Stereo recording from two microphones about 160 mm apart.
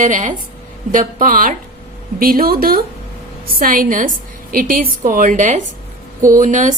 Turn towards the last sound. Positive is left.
turn(degrees=-55)  # may be behind; listen again after turning